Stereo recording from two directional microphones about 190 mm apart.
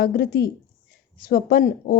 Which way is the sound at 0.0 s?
55° left (ahead or behind).